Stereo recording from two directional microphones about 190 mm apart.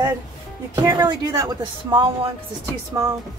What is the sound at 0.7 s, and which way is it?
Speech, 20° right (ahead or behind).